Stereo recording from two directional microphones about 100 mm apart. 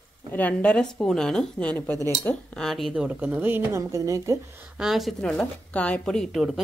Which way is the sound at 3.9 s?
30° right (ahead or behind).